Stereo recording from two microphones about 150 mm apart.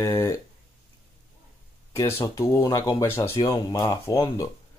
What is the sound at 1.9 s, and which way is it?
Speech, 15° left (ahead or behind).